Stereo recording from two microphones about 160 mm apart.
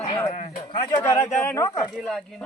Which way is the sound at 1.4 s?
20° left (ahead or behind).